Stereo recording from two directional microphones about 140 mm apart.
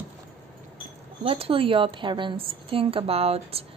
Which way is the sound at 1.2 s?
40° right (ahead or behind).